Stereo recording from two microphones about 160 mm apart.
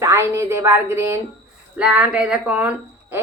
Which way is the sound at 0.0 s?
15° right (ahead or behind).